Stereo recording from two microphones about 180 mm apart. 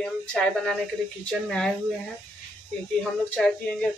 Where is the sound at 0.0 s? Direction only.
5° left (ahead or behind).